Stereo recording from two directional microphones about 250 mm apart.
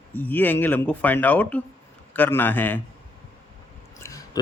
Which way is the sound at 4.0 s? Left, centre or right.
Centre.